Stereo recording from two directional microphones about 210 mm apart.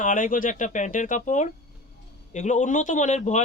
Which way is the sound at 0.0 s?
35° left (ahead or behind).